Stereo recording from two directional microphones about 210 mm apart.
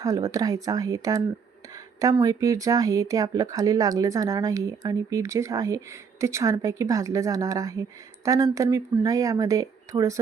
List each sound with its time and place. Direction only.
0.0 s speech: 15° right (ahead or behind)